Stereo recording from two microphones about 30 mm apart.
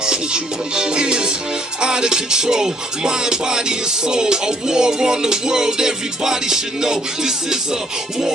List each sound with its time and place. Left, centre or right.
0.0 s music: right